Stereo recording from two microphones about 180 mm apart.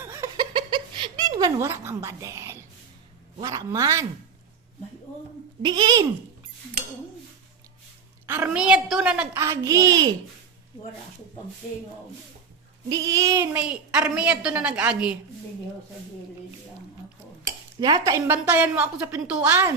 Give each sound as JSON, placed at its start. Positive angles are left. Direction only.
{"t": 0.0, "sound": "a sound", "side_deg": -15}
{"t": 3.4, "sound": "a woman's voice", "side_deg": -20}
{"t": 5.6, "sound": "speech", "side_deg": -25}
{"t": 8.3, "sound": "a woman's voice", "side_deg": -5}
{"t": 12.9, "sound": "a woman's voice", "side_deg": -20}
{"t": 17.7, "sound": "a woman's voice", "side_deg": -20}